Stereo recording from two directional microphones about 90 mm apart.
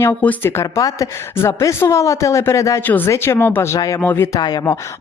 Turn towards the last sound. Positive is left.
turn(degrees=45)  # may be behind; listen again after turning